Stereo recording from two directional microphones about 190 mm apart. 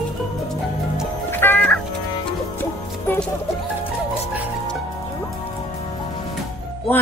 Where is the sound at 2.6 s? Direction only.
10° left (ahead or behind).